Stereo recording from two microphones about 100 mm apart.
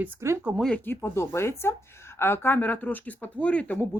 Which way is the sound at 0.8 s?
20° left (ahead or behind).